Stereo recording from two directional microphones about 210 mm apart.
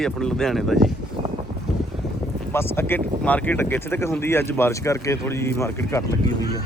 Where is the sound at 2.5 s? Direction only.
10° left (ahead or behind).